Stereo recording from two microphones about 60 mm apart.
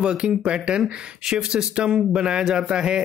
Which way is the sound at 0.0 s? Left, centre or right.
Centre.